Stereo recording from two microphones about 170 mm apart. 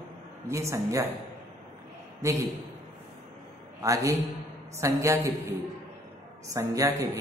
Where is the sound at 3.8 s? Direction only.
20° right (ahead or behind).